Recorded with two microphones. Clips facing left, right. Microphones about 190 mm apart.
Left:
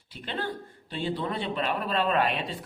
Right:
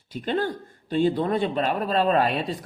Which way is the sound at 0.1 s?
45° right (ahead or behind).